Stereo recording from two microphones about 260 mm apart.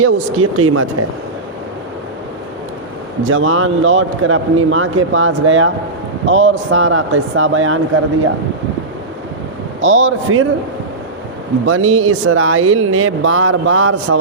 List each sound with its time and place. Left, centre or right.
0.0 s speech: right
3.2 s speech: right
9.8 s speech: right
11.6 s speech: right